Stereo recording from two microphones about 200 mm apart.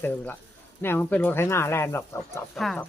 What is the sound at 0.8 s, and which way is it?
Speech, 10° left (ahead or behind).